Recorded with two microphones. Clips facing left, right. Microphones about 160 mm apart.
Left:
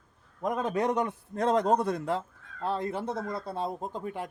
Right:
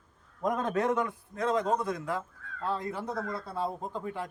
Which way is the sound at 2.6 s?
25° left (ahead or behind).